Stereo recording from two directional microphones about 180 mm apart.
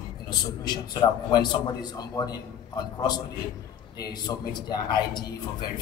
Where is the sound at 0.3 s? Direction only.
25° left (ahead or behind).